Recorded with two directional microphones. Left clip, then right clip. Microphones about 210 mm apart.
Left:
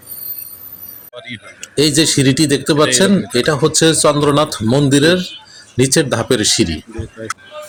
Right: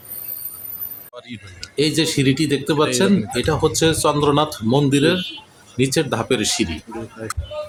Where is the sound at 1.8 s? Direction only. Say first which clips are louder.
Left 6 dB; 20° left (ahead or behind).